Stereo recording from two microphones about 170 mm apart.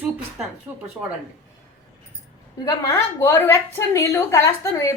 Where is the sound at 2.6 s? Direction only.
15° left (ahead or behind).